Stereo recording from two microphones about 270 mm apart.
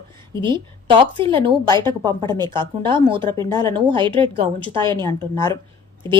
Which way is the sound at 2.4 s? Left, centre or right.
Centre.